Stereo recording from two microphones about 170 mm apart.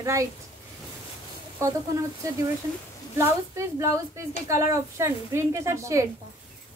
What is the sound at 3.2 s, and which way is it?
A woman's voice, 20° right (ahead or behind).